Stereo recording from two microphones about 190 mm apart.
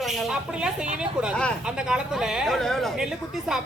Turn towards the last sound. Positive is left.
turn(degrees=0)  # may be behind; listen again after turning